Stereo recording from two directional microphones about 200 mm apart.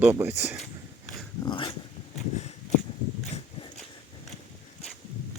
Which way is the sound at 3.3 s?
25° left (ahead or behind).